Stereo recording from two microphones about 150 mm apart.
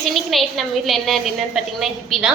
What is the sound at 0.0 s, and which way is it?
A woman's voice, centre (ahead or behind).